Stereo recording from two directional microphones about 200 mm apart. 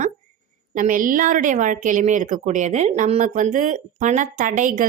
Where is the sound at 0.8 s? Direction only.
40° right (ahead or behind).